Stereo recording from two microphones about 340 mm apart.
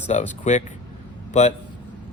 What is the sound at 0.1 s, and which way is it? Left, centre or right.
A man's voice, left.